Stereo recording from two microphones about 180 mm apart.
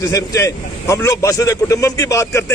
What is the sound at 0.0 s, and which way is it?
Speech, 20° left (ahead or behind).